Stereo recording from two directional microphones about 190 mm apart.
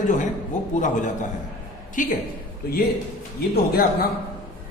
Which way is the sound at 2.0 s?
45° left (ahead or behind).